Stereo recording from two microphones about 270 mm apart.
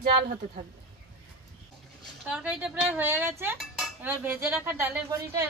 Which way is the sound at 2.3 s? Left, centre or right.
Centre.